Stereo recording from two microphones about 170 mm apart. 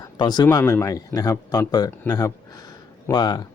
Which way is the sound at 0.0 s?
25° left (ahead or behind).